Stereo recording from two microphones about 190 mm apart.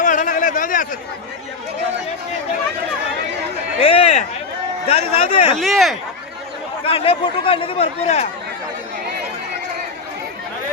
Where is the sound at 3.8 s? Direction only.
30° left (ahead or behind).